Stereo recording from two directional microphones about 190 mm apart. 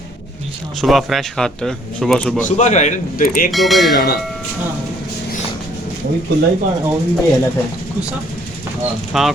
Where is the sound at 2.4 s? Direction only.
40° left (ahead or behind).